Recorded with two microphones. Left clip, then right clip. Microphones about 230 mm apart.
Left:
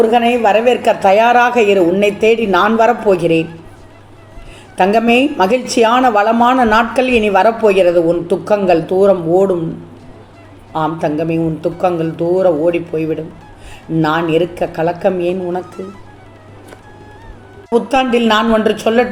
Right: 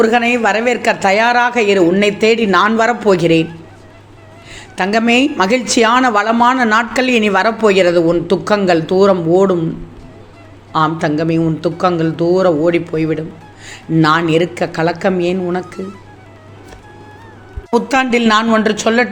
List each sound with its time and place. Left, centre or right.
0.0 s a woman's voice: right
3.2 s speech: right
4.8 s a woman's voice: right
10.7 s a man's voice: right
17.7 s speech: right
18.2 s a woman's voice: right